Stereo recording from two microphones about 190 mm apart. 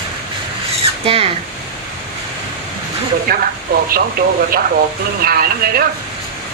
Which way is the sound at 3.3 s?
50° right (ahead or behind).